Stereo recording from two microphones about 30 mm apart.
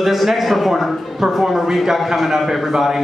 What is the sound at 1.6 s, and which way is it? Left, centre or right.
Speech, centre.